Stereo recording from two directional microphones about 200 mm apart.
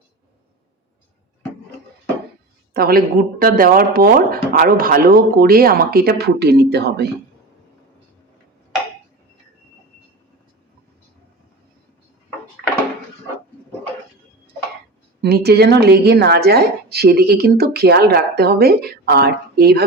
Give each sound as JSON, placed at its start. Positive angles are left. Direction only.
{"t": 2.7, "sound": "a woman's voice", "side_deg": -50}
{"t": 15.2, "sound": "a woman's voice", "side_deg": -55}